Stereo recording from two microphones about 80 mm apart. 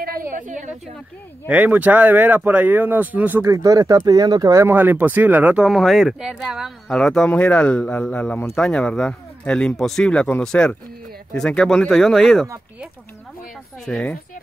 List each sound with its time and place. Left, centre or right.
1.5 s speech: centre
3.4 s speech: right
4.6 s speech: right
5.7 s speech: centre
6.9 s speech: centre
7.2 s speech: centre
13.8 s speech: centre